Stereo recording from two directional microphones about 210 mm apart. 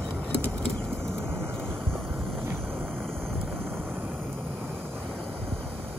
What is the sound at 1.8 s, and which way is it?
Boat, centre (ahead or behind).